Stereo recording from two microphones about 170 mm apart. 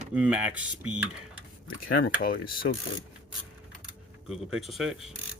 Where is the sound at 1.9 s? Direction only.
65° left (ahead or behind).